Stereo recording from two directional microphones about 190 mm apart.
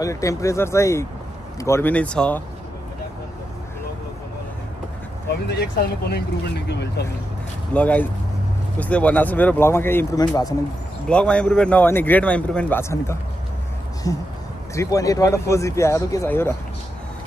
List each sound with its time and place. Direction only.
0.0 s speech: 15° left (ahead or behind)
5.5 s speech: 60° left (ahead or behind)
7.7 s speech: 10° left (ahead or behind)
11.1 s speech: 5° left (ahead or behind)